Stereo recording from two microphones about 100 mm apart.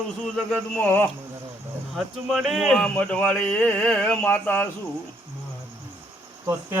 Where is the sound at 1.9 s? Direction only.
Centre (ahead or behind).